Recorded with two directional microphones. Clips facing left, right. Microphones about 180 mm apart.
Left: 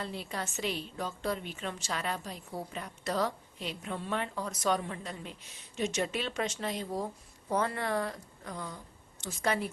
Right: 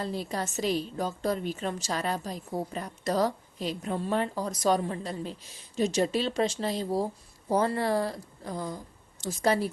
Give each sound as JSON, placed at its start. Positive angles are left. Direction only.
{"t": 0.0, "sound": "a woman's voice", "side_deg": -40}